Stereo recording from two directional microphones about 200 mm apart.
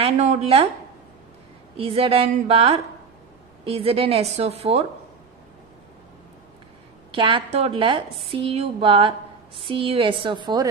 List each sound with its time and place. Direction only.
0.0 s a woman's voice: 30° right (ahead or behind)
1.8 s a woman's voice: 30° right (ahead or behind)
7.1 s a woman's voice: 25° right (ahead or behind)